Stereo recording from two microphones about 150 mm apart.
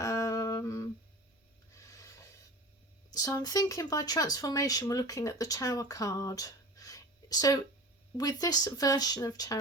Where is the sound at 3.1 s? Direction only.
25° left (ahead or behind).